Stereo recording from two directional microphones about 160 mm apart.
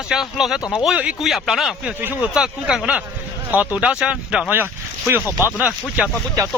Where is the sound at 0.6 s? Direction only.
25° left (ahead or behind).